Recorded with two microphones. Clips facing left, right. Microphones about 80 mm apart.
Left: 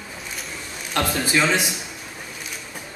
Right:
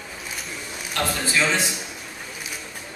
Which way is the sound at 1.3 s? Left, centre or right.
Centre.